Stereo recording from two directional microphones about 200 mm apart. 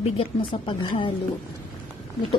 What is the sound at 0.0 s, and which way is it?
Speech, 30° left (ahead or behind).